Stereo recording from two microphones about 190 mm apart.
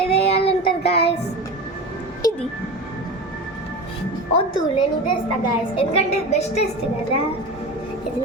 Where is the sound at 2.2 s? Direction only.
20° left (ahead or behind).